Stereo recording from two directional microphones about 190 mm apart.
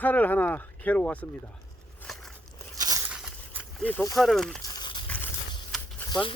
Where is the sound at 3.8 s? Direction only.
15° left (ahead or behind).